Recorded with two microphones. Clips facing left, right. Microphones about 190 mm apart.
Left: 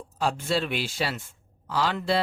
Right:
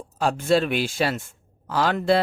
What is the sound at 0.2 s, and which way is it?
Speech, 50° right (ahead or behind).